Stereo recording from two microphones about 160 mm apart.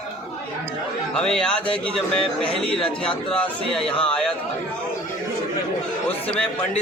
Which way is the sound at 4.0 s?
5° left (ahead or behind).